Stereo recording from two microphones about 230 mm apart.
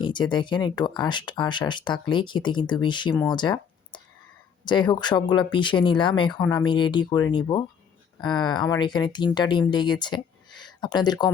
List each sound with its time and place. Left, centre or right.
0.0 s speech: centre
3.2 s a sound: centre
4.6 s speech: centre